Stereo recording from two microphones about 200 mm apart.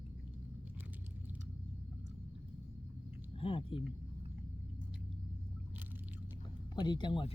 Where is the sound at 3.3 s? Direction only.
25° left (ahead or behind).